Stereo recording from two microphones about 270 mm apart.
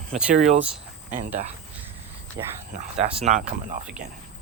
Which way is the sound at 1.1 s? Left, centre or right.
Right.